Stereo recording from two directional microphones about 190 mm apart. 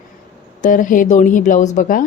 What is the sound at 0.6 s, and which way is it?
A woman's voice, 45° left (ahead or behind).